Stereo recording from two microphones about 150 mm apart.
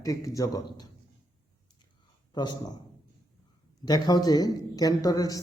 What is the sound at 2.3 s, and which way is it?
Speech, 30° left (ahead or behind).